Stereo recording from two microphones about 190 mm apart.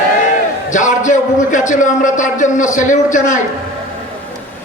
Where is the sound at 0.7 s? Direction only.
40° left (ahead or behind).